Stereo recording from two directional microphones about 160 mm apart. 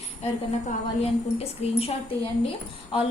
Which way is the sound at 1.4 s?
40° left (ahead or behind).